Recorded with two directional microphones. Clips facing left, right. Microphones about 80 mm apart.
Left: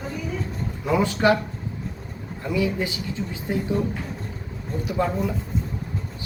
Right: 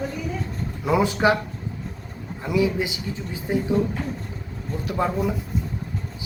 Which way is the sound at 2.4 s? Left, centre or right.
Centre.